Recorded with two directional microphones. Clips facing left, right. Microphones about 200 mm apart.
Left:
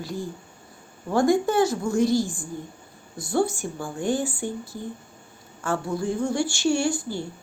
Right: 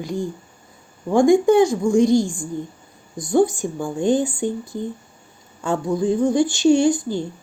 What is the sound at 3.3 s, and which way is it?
A woman's voice, 15° right (ahead or behind).